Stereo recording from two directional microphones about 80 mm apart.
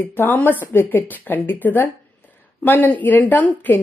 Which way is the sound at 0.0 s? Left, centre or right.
Left.